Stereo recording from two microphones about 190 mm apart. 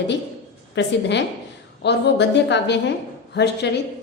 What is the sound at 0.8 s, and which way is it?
A woman's voice, 65° left (ahead or behind).